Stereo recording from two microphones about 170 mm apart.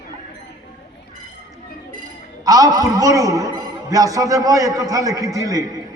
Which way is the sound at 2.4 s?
20° right (ahead or behind).